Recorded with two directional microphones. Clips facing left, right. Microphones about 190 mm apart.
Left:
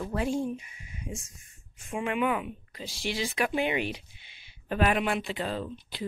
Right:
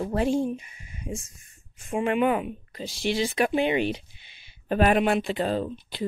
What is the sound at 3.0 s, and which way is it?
Speech, 25° right (ahead or behind).